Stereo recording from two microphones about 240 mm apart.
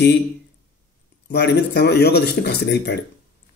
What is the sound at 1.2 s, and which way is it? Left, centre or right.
A man's voice, left.